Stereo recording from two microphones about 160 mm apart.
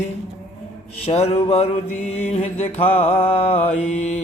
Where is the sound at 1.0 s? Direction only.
40° left (ahead or behind).